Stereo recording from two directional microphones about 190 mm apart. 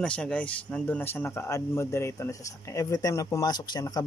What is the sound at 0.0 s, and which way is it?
Speech, 5° left (ahead or behind).